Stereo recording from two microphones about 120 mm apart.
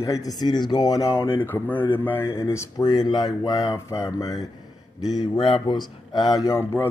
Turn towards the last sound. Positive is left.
turn(degrees=25)  # may be behind; listen again after turning